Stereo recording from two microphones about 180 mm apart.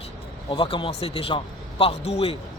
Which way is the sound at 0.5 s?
30° left (ahead or behind).